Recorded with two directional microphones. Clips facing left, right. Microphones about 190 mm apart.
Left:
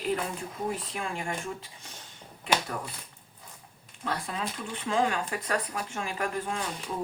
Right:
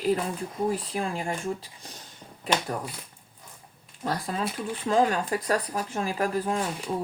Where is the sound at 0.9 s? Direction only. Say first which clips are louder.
Right 4 dB; 35° right (ahead or behind).